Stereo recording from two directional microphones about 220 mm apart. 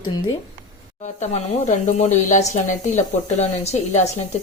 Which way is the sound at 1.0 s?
30° left (ahead or behind).